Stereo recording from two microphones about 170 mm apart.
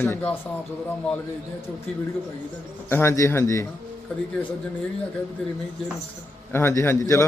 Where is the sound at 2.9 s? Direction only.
15° left (ahead or behind).